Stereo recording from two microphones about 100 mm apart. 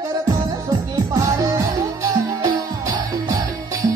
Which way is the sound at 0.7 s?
40° right (ahead or behind).